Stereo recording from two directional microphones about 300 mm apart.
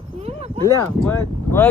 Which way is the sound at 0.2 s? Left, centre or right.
Right.